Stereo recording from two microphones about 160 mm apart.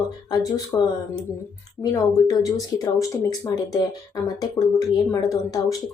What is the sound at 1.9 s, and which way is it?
Speech, 20° left (ahead or behind).